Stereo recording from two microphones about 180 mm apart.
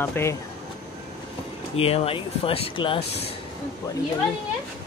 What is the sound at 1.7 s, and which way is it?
Speech, 30° left (ahead or behind).